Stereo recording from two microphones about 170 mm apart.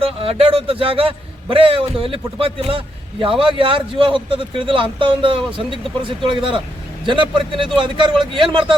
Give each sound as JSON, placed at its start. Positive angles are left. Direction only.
{"t": 0.0, "sound": "a man's voice", "side_deg": -35}